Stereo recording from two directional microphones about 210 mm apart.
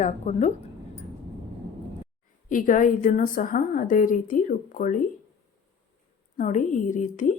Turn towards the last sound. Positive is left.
turn(degrees=35)  # may be behind; listen again after turning